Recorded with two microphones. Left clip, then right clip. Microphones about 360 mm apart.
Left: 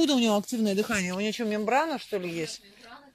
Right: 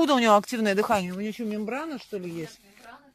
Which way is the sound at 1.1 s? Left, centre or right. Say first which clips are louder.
Left 4 dB; centre.